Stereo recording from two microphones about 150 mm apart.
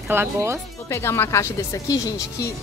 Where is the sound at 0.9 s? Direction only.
15° left (ahead or behind).